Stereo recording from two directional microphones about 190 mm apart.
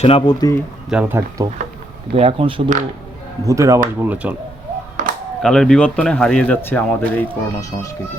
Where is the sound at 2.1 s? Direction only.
30° right (ahead or behind).